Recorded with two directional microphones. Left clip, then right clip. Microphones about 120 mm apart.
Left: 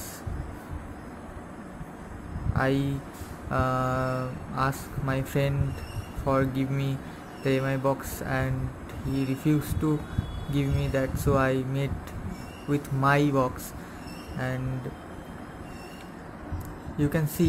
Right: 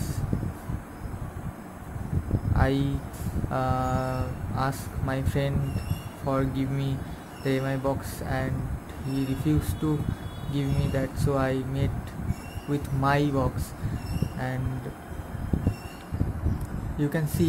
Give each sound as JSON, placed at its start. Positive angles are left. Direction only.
{"t": 2.5, "sound": "speech", "side_deg": 0}
{"t": 17.0, "sound": "speech", "side_deg": 0}